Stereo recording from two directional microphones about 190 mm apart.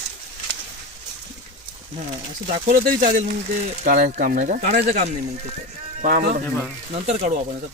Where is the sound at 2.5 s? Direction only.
45° right (ahead or behind).